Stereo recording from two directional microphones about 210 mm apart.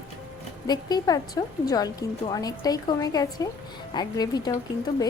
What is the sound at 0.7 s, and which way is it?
A woman's voice, 20° left (ahead or behind).